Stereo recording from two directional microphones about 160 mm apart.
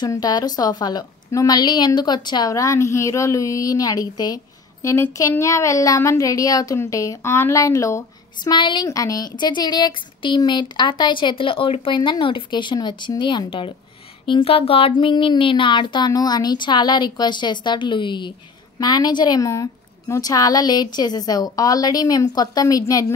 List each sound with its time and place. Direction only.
0.0 s speech: 25° left (ahead or behind)